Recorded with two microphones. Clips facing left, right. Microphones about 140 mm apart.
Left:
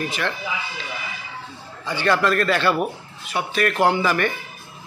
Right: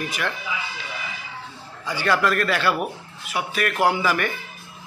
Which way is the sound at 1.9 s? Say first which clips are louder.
Left 2 dB; 5° right (ahead or behind).